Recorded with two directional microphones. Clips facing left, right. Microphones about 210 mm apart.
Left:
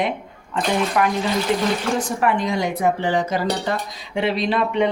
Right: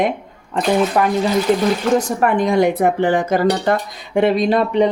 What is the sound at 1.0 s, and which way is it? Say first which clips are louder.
Speech: right 3 dB; 35° right (ahead or behind).